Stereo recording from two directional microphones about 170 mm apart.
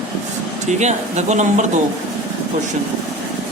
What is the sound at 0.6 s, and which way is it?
Speech, 40° right (ahead or behind).